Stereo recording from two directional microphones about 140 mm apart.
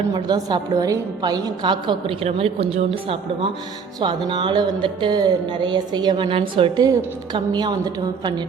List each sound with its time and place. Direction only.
0.1 s a woman's voice: 30° right (ahead or behind)
2.2 s a woman's voice: 45° right (ahead or behind)